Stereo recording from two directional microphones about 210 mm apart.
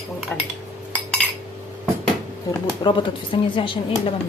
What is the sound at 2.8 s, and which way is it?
Speech, 25° left (ahead or behind).